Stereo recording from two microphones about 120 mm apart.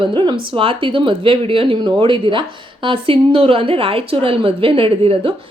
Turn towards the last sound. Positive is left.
turn(degrees=-50)  # may be behind; listen again after turning